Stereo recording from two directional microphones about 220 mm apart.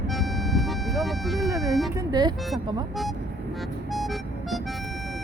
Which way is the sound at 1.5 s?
15° right (ahead or behind).